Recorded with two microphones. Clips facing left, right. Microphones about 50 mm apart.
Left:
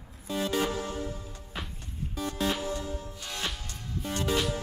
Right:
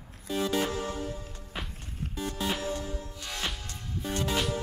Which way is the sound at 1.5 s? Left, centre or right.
Centre.